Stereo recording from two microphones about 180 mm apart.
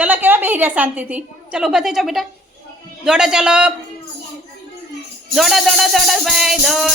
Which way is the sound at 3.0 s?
5° right (ahead or behind).